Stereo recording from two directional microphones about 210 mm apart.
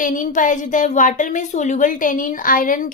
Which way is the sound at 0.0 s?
40° left (ahead or behind).